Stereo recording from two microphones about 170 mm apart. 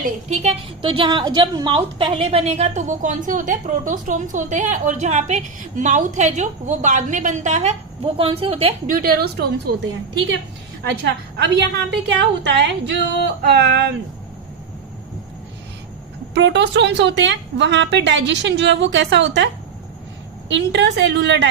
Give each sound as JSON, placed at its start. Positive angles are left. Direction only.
{"t": 0.0, "sound": "a woman's voice", "side_deg": -45}
{"t": 0.8, "sound": "a woman's voice", "side_deg": -30}
{"t": 8.9, "sound": "a woman's voice", "side_deg": -60}
{"t": 11.0, "sound": "a woman's voice", "side_deg": -75}
{"t": 12.4, "sound": "a woman's voice", "side_deg": -90}
{"t": 16.3, "sound": "a woman's voice", "side_deg": -90}
{"t": 20.5, "sound": "a woman's voice", "side_deg": -90}